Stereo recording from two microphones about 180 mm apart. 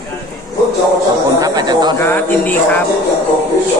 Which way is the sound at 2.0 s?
10° left (ahead or behind).